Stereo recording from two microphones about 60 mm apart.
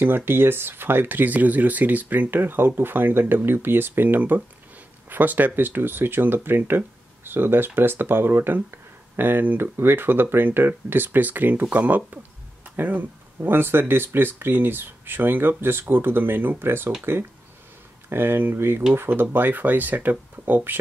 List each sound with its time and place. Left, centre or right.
0.0 s speech: right